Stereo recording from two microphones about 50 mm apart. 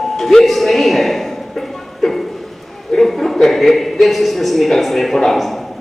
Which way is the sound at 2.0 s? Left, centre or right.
Centre.